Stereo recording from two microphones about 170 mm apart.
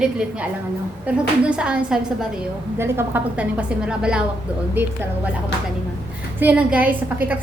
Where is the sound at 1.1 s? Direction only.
5° right (ahead or behind).